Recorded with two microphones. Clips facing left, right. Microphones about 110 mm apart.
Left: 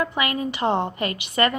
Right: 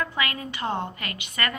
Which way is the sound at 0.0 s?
20° left (ahead or behind).